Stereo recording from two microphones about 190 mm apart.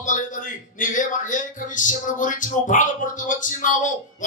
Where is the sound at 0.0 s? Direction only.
45° left (ahead or behind).